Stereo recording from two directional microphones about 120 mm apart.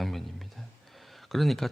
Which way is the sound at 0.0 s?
Centre (ahead or behind).